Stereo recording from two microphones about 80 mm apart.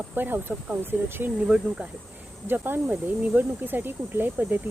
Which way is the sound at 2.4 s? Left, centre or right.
Right.